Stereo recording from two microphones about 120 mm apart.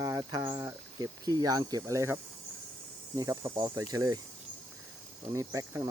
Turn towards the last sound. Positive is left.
turn(degrees=-25)  # may be behind; listen again after turning